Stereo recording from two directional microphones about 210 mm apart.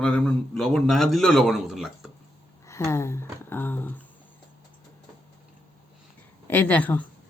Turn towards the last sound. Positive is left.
turn(degrees=5)  # may be behind; listen again after turning